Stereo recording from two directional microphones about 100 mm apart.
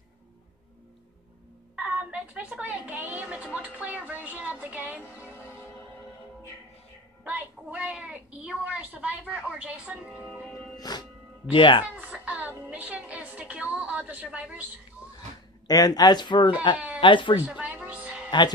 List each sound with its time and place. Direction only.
1.8 s a woman's voice: 10° right (ahead or behind)
5.1 s music: 15° right (ahead or behind)
7.2 s a woman's voice: 15° right (ahead or behind)
10.8 s music: 45° left (ahead or behind)
11.5 s speech: 55° left (ahead or behind)
12.0 s a woman's voice: 10° right (ahead or behind)
15.6 s speech: 40° left (ahead or behind)
16.7 s bleat: 15° right (ahead or behind)
17.0 s speech: 55° left (ahead or behind)
17.5 s speech: 15° right (ahead or behind)
17.7 s music: 10° right (ahead or behind)